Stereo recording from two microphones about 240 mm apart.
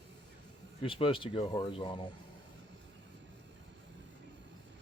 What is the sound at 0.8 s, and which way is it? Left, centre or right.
Speech, left.